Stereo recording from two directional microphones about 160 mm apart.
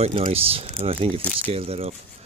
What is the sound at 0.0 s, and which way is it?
Speech, 40° right (ahead or behind).